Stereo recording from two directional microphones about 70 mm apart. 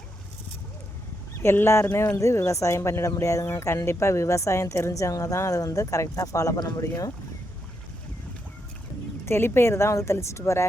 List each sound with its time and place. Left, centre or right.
1.4 s speech: left
6.6 s speech: left
9.2 s speech: left